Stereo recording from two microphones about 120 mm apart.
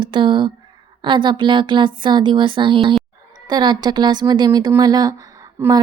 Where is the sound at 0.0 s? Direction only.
45° right (ahead or behind).